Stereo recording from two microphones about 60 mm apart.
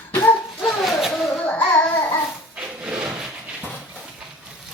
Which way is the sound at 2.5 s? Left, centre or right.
Centre.